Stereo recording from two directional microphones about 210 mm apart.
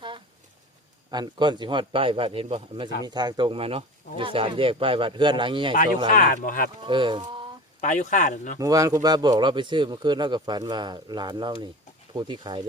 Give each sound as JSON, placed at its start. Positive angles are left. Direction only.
{"t": 1.1, "sound": "speech", "side_deg": -20}
{"t": 6.1, "sound": "speech", "side_deg": 40}
{"t": 6.8, "sound": "speech", "side_deg": -25}
{"t": 7.8, "sound": "speech", "side_deg": 35}
{"t": 8.5, "sound": "speech", "side_deg": -15}